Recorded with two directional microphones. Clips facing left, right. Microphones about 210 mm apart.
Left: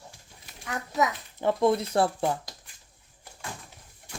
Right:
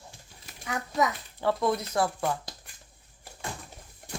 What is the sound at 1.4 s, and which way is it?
Speech, 20° left (ahead or behind).